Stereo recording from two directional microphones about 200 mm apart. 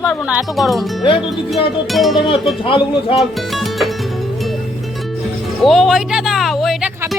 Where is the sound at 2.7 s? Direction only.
25° left (ahead or behind).